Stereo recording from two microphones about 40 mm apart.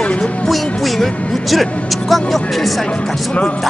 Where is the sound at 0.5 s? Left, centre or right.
Centre.